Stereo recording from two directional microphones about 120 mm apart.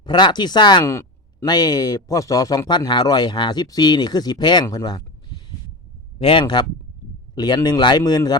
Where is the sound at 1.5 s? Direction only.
35° left (ahead or behind).